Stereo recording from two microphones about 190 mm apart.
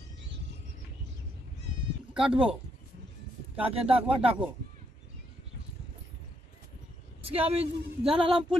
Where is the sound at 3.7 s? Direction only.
30° right (ahead or behind).